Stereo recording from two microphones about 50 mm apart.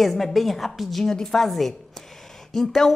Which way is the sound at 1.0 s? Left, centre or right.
Centre.